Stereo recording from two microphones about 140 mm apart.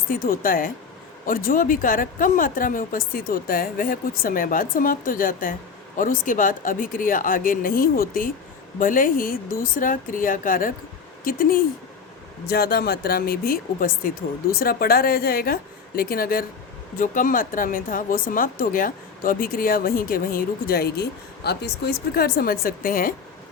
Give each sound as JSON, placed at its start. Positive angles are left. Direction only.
{"t": 0.1, "sound": "a woman's voice", "side_deg": 90}
{"t": 1.2, "sound": "a woman's voice", "side_deg": 75}
{"t": 8.8, "sound": "speech", "side_deg": 80}
{"t": 11.2, "sound": "speech", "side_deg": 90}
{"t": 17.0, "sound": "a woman's voice", "side_deg": 75}
{"t": 22.1, "sound": "speech", "side_deg": 90}